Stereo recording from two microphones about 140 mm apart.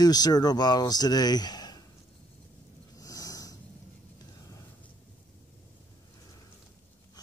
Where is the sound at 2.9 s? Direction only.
25° left (ahead or behind).